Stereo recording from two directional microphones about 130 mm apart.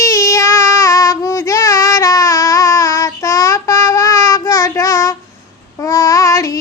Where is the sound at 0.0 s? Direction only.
25° left (ahead or behind).